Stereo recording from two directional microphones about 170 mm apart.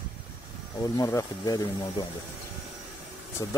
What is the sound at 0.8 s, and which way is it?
Speech, 20° left (ahead or behind).